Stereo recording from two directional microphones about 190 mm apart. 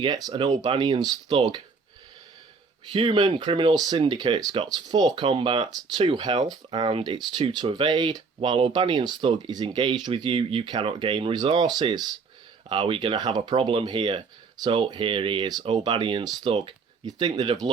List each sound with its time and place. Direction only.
0.3 s speech: 20° right (ahead or behind)
2.9 s speech: 25° right (ahead or behind)